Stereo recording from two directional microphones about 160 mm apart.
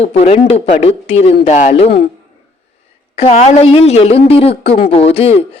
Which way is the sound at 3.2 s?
40° left (ahead or behind).